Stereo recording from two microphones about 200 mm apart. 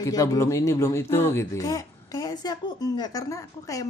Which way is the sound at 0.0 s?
15° left (ahead or behind).